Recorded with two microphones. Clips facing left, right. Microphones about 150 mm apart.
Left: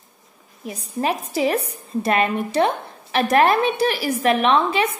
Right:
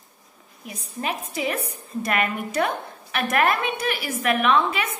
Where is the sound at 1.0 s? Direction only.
35° left (ahead or behind).